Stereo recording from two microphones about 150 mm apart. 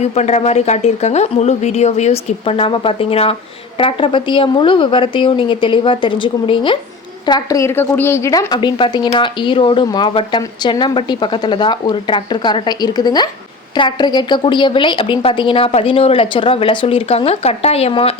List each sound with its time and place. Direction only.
0.0 s a woman's voice: 50° left (ahead or behind)